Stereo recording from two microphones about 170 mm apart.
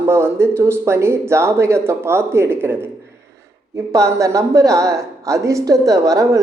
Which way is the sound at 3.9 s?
20° right (ahead or behind).